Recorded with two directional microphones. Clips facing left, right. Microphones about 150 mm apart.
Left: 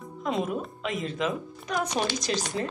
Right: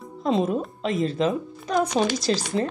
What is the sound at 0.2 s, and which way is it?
Speech, 30° right (ahead or behind).